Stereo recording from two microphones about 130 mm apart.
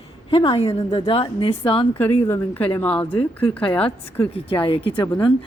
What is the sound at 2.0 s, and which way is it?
Speech, 15° left (ahead or behind).